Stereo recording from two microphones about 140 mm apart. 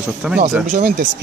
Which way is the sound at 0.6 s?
80° right.